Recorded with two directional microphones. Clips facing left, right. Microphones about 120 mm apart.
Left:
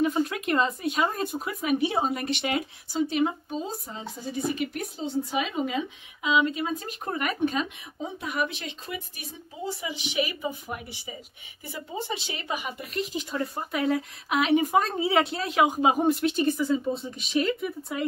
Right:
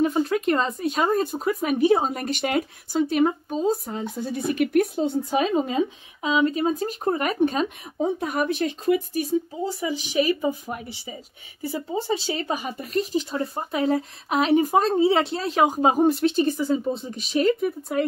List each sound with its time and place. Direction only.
0.0 s a woman's voice: 35° right (ahead or behind); by 5.4 s 55° right (ahead or behind)
5.4 s speech: 35° right (ahead or behind)